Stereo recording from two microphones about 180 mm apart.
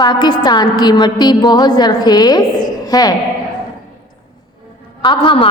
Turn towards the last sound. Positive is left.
turn(degrees=30)  # may be behind; listen again after turning